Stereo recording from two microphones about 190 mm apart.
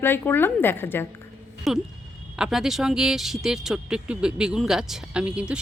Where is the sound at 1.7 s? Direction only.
Centre (ahead or behind).